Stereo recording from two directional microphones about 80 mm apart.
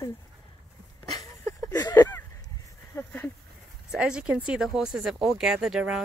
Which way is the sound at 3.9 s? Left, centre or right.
Centre.